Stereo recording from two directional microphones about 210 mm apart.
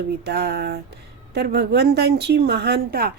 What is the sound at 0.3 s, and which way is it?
Speech, 50° right (ahead or behind).